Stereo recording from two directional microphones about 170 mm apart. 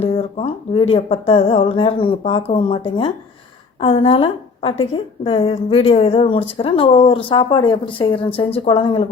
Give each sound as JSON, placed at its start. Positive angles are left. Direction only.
{"t": 0.0, "sound": "a woman's voice", "side_deg": 35}